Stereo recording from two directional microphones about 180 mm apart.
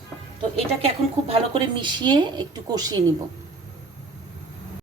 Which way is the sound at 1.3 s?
25° right (ahead or behind).